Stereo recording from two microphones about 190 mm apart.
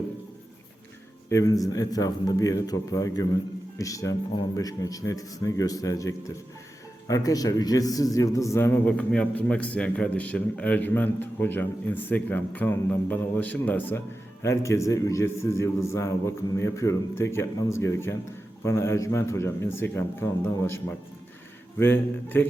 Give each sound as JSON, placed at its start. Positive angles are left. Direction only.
{"t": 1.3, "sound": "a man's voice", "side_deg": 15}